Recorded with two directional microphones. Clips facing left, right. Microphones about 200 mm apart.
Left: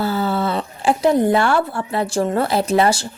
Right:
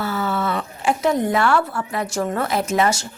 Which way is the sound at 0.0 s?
30° left (ahead or behind).